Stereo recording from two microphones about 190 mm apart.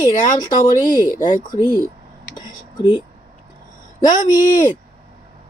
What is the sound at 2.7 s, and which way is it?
Speech, 25° left (ahead or behind).